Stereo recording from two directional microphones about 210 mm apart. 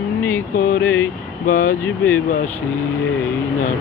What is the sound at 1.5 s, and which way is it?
Speech, 40° left (ahead or behind).